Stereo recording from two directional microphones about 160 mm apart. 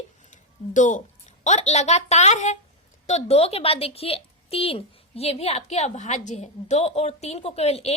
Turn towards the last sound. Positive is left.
turn(degrees=40)  # may be behind; listen again after turning